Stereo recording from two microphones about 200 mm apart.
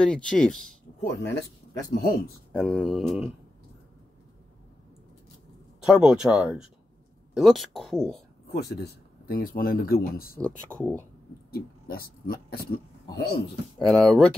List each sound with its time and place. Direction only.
0.0 s speech: 5° left (ahead or behind)
1.9 s speech: 50° left (ahead or behind)
2.5 s speech: 5° left (ahead or behind)
5.9 s speech: 5° right (ahead or behind)
8.5 s speech: 55° left (ahead or behind)
10.3 s speech: 5° left (ahead or behind)
11.5 s speech: 50° left (ahead or behind)
13.7 s speech: centre (ahead or behind)